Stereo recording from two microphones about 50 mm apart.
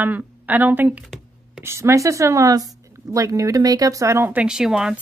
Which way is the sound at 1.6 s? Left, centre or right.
Right.